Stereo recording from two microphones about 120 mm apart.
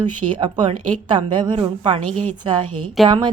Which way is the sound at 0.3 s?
40° right (ahead or behind).